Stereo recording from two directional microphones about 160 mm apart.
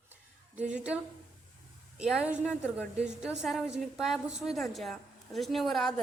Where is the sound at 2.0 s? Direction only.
5° right (ahead or behind).